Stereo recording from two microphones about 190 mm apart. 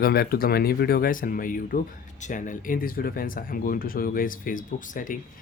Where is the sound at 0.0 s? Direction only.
50° left (ahead or behind).